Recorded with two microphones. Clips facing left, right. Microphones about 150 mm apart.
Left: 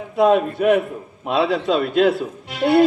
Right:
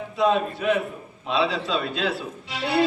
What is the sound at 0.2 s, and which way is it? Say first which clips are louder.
A man's voice: left 6 dB; 50° left (ahead or behind).